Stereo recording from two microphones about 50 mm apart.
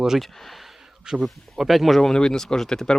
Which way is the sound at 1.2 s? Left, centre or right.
Centre.